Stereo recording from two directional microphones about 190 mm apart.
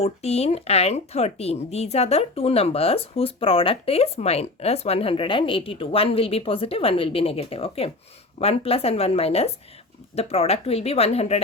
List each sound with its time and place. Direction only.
0.0 s speech: 35° left (ahead or behind)